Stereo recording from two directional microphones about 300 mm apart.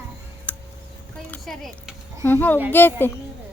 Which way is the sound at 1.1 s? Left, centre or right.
Centre.